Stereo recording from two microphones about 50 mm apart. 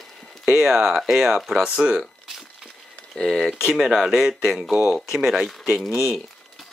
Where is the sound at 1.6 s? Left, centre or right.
Centre.